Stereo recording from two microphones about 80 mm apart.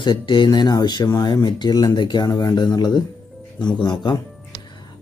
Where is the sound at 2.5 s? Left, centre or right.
Left.